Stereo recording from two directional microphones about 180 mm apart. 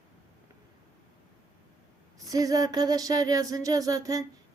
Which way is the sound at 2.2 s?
20° right (ahead or behind).